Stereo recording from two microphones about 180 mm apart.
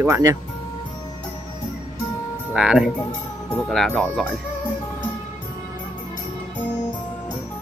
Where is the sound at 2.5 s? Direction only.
5° right (ahead or behind).